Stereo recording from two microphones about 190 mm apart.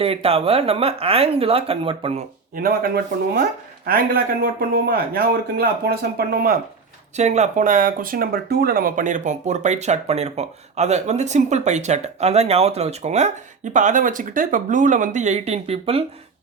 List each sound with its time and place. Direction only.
0.0 s speech: 30° right (ahead or behind)
2.6 s speech: 55° right (ahead or behind)
4.7 s speech: 55° right (ahead or behind)
7.2 s speech: 35° right (ahead or behind)